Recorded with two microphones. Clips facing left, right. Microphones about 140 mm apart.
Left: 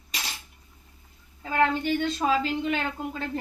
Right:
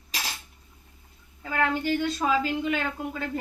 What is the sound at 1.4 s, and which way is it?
A woman's voice, 25° left (ahead or behind).